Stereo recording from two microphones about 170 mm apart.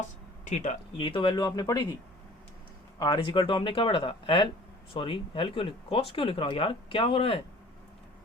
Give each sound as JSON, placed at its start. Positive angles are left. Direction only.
{"t": 0.4, "sound": "speech", "side_deg": 45}
{"t": 0.9, "sound": "speech", "side_deg": 30}
{"t": 3.0, "sound": "speech", "side_deg": 30}